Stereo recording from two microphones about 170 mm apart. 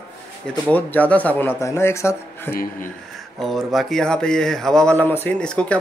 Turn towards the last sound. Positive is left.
turn(degrees=5)  # may be behind; listen again after turning